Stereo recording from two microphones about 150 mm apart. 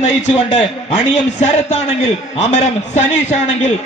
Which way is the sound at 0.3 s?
35° left (ahead or behind).